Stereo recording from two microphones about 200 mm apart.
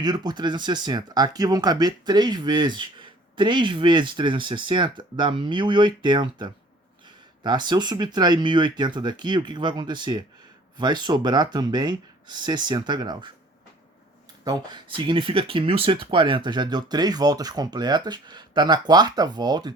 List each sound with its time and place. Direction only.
0.0 s speech: 20° right (ahead or behind)
14.4 s speech: 25° right (ahead or behind)